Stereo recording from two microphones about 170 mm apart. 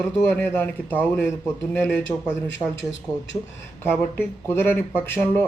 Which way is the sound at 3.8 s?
15° left (ahead or behind).